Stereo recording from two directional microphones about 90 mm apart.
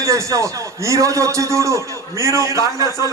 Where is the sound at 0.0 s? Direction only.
35° right (ahead or behind).